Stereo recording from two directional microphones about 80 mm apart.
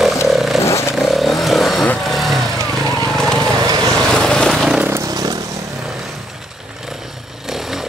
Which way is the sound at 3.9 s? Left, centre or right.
Centre.